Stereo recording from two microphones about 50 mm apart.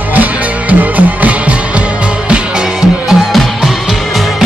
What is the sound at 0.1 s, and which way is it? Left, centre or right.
Music, right.